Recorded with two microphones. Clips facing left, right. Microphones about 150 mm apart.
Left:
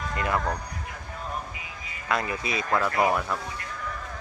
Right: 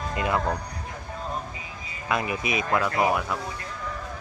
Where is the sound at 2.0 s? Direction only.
15° right (ahead or behind).